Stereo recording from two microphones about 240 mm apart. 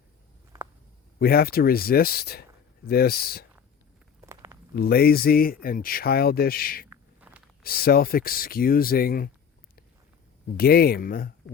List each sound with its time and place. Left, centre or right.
1.2 s speech: left
4.2 s walk: centre
4.7 s speech: left
6.9 s a sound: centre
7.6 s speech: left
10.6 s speech: left